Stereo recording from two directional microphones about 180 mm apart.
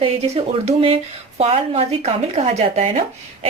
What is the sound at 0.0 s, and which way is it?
A woman's voice, 30° right (ahead or behind).